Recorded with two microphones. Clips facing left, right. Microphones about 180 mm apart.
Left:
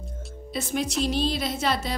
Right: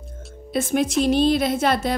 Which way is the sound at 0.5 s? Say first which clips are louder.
Right 7 dB; 50° right (ahead or behind).